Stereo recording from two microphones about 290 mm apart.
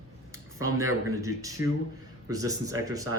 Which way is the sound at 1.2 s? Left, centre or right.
Centre.